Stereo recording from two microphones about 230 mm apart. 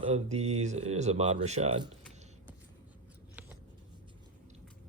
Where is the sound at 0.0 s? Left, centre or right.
Right.